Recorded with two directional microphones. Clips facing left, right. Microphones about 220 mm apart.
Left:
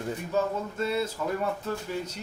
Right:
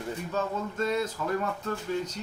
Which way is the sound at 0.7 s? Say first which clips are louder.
Right 1 dB; 10° left (ahead or behind).